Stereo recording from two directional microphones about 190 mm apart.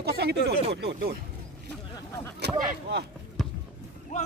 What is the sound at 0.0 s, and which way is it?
Speech, 60° right (ahead or behind).